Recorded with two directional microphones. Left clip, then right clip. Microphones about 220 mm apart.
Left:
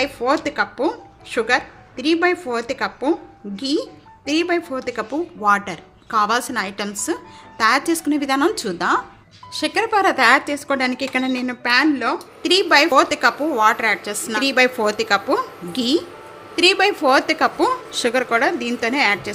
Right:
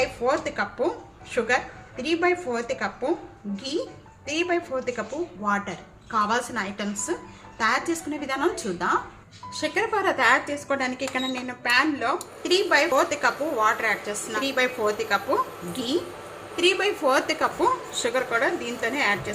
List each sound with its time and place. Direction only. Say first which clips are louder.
0.0 s speech: left 4 dB; 50° left (ahead or behind)